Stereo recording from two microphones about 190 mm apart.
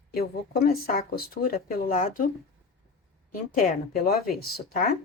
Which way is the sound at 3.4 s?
50° left (ahead or behind).